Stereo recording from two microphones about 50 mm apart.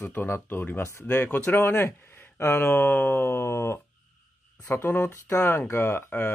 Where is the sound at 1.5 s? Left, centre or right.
Left.